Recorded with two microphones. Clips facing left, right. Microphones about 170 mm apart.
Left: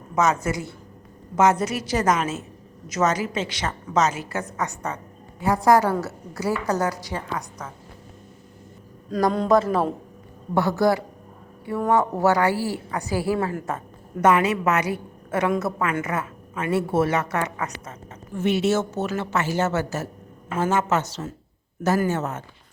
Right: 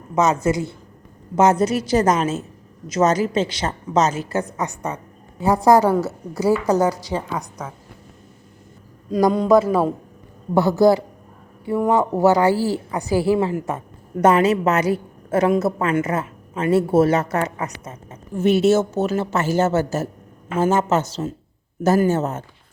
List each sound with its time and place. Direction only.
0.2 s a woman's voice: 20° right (ahead or behind)
1.4 s a woman's voice: 30° right (ahead or behind)
5.6 s a woman's voice: 20° right (ahead or behind)
9.0 s a man's voice: 5° right (ahead or behind)
10.8 s a woman's voice: 30° right (ahead or behind)
11.8 s speech: 15° right (ahead or behind)
12.1 s a woman's voice: 35° right (ahead or behind); by 13.8 s 15° right (ahead or behind)
14.2 s a woman's voice: 35° right (ahead or behind)
22.1 s a woman's voice: 35° right (ahead or behind)